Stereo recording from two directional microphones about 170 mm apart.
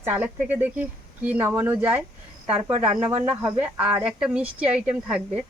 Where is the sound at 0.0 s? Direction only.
10° right (ahead or behind).